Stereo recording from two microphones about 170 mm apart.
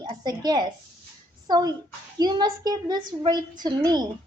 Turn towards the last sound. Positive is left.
turn(degrees=-25)  # may be behind; listen again after turning